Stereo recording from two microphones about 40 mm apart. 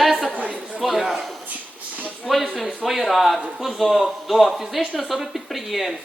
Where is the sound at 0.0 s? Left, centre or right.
Centre.